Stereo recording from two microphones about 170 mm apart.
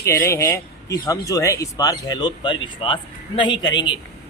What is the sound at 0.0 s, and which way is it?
Speech, 15° left (ahead or behind).